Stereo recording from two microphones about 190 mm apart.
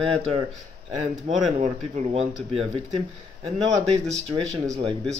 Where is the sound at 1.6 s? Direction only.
35° right (ahead or behind).